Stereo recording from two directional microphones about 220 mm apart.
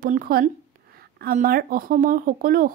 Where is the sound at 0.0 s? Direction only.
40° right (ahead or behind).